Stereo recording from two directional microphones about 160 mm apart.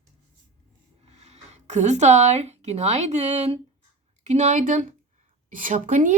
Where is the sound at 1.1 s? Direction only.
45° right (ahead or behind).